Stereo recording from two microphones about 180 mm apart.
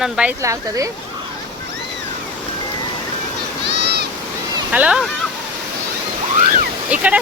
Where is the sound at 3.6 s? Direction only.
70° right (ahead or behind).